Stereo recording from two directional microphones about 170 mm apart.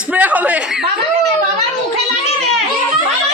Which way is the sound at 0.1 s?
10° right (ahead or behind).